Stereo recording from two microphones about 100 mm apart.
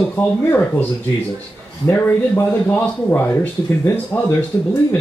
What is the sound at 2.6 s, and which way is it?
Speech, 20° left (ahead or behind).